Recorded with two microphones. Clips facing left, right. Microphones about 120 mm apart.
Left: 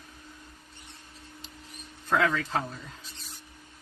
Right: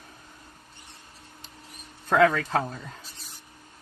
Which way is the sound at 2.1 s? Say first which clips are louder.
Right 5 dB; 45° right (ahead or behind).